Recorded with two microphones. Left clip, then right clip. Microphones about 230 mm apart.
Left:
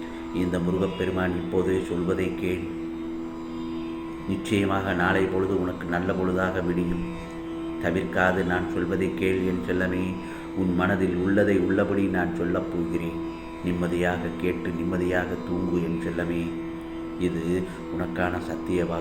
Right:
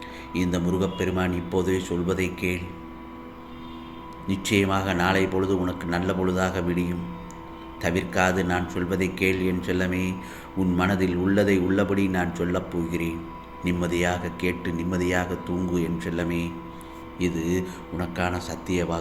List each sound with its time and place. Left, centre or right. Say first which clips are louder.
0.3 s speech: even; right
4.4 s speech: right 2 dB; right
7.9 s speech: even; right